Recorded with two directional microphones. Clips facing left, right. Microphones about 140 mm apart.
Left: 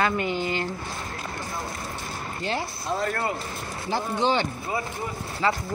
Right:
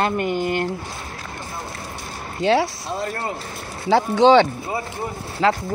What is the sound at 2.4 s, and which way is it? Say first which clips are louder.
Speech: right 12 dB; 90° right.